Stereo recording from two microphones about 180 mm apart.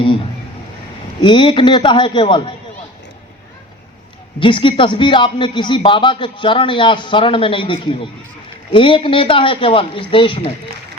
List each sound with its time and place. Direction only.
1.2 s a man's voice: 25° left (ahead or behind)
4.4 s a man's voice: 30° left (ahead or behind)